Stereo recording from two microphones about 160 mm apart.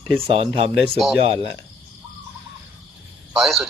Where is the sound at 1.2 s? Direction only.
35° right (ahead or behind).